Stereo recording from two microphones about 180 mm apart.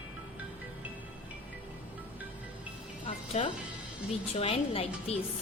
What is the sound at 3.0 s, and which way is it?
A woman's voice, 35° left (ahead or behind).